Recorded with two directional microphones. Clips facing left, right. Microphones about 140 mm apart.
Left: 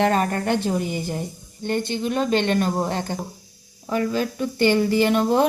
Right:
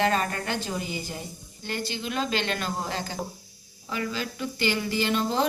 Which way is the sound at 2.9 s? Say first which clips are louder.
Left 5 dB; 55° left (ahead or behind).